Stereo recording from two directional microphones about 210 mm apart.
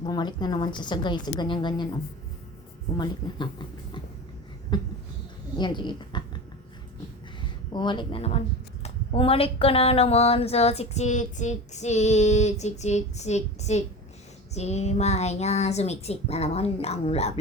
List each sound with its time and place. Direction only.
0.0 s a woman's voice: 20° left (ahead or behind)
3.0 s a woman's voice: 20° left (ahead or behind)
4.7 s a woman's voice: 20° left (ahead or behind)
7.7 s a woman's voice: 20° left (ahead or behind)
8.8 s a sound: 25° left (ahead or behind)